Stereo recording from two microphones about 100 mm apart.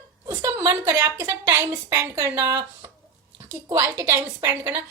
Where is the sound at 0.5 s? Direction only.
20° right (ahead or behind).